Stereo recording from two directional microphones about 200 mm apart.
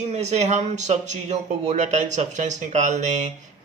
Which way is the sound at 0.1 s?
35° right (ahead or behind).